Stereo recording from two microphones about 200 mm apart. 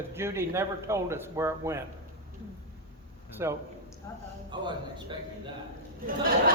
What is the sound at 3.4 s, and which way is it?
A man's voice, 15° right (ahead or behind).